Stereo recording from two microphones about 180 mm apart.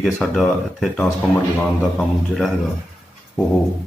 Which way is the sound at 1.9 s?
Centre (ahead or behind).